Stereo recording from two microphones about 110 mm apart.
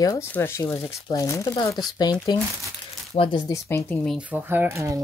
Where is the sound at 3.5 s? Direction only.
20° left (ahead or behind).